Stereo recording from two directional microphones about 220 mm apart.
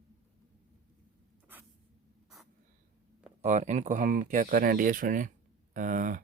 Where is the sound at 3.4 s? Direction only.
30° right (ahead or behind).